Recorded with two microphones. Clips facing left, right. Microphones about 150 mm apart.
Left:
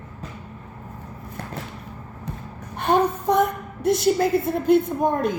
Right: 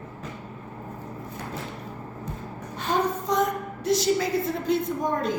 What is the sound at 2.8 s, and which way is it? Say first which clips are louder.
A woman's voice: left 5 dB; 55° left (ahead or behind).